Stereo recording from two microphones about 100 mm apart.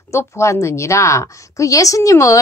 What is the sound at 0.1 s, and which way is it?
A woman's voice, 30° left (ahead or behind).